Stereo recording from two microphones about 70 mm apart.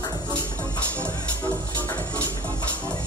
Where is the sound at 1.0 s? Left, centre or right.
Left.